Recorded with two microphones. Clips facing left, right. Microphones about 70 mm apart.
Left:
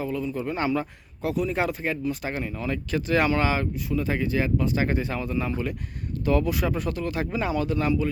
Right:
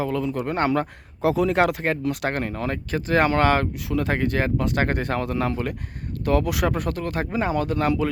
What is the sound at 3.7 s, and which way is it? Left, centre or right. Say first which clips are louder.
Speech: right 2 dB; right.